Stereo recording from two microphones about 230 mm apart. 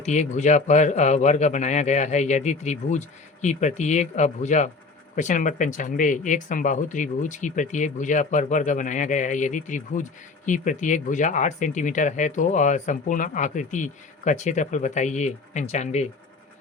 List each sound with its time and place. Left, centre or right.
0.0 s speech: left